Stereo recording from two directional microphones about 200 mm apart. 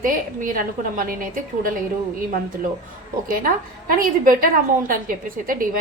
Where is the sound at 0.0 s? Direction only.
45° right (ahead or behind).